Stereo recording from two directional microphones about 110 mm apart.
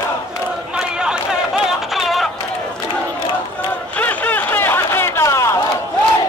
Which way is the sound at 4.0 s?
15° left (ahead or behind).